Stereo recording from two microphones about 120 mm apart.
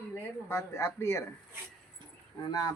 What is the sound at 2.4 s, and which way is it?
Speech, 35° left (ahead or behind).